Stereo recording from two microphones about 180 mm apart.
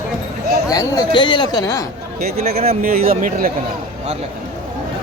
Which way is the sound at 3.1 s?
55° right (ahead or behind).